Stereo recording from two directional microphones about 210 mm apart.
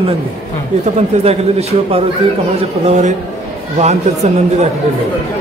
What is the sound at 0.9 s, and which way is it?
A man's voice, 30° right (ahead or behind).